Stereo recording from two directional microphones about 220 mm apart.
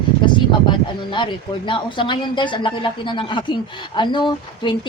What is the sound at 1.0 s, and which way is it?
A man's voice, 20° left (ahead or behind).